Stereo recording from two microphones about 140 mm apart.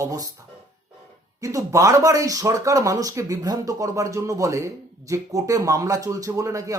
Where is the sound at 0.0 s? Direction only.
25° right (ahead or behind).